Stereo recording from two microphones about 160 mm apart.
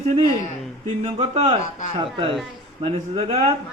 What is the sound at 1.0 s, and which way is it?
Speech, 40° right (ahead or behind).